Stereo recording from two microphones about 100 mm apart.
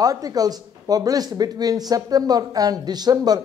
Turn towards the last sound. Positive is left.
turn(degrees=-40)  # may be behind; listen again after turning